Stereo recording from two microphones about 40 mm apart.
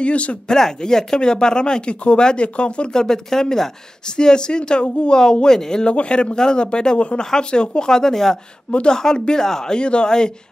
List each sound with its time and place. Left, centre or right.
0.0 s speech: left
0.5 s speech: centre
5.1 s speech: centre
5.9 s speech: left